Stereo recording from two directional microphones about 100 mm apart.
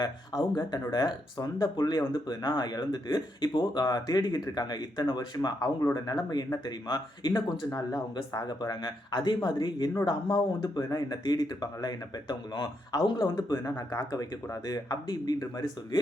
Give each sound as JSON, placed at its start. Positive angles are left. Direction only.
{"t": 0.0, "sound": "speech", "side_deg": 45}
{"t": 13.5, "sound": "speech", "side_deg": 35}